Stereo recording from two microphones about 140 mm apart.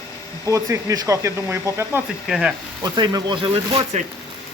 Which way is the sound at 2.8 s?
25° right (ahead or behind).